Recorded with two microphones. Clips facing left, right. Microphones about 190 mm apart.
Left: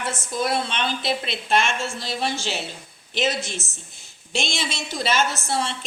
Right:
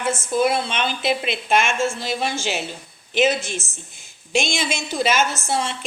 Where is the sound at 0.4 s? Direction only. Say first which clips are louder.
Even; 5° right (ahead or behind).